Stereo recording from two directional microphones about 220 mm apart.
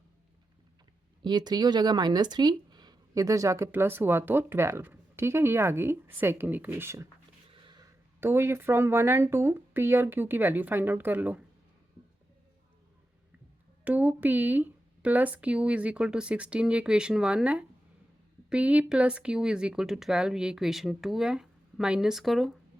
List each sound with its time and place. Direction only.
1.2 s speech: 20° right (ahead or behind)
13.8 s speech: 5° right (ahead or behind)